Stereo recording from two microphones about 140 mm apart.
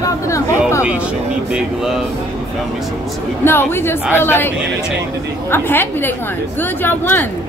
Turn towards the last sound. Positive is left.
turn(degrees=15)  # may be behind; listen again after turning